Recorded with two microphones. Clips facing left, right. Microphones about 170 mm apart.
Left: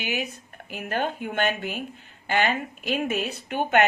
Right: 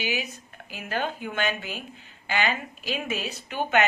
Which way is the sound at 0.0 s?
55° left (ahead or behind).